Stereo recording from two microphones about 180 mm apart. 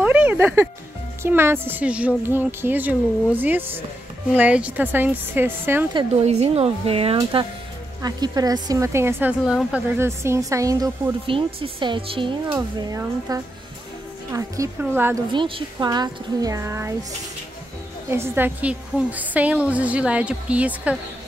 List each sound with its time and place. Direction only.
0.0 s music: 10° right (ahead or behind)
1.2 s speech: 15° right (ahead or behind)
6.2 s speech: 35° right (ahead or behind)
8.0 s speech: 20° right (ahead or behind)
9.4 s speech: centre (ahead or behind); by 13.4 s 20° right (ahead or behind)
14.8 s speech: 10° right (ahead or behind)
15.3 s speech: 30° right (ahead or behind)
18.1 s speech: 15° right (ahead or behind)